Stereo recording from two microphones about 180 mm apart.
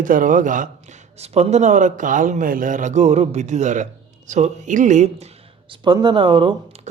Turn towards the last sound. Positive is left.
turn(degrees=-25)  # may be behind; listen again after turning